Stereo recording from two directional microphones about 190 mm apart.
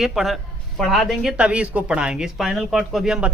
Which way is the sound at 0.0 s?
Centre (ahead or behind).